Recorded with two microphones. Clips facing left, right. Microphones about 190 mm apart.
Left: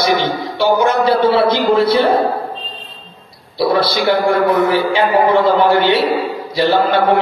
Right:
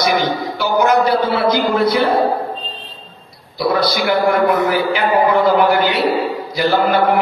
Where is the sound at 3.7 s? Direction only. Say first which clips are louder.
Left 1 dB; 30° left (ahead or behind).